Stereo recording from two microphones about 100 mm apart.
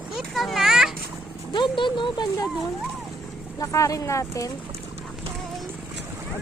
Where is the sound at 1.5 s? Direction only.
55° left (ahead or behind).